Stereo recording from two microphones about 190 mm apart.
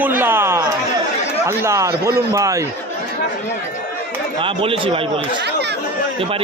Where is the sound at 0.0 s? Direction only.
10° right (ahead or behind).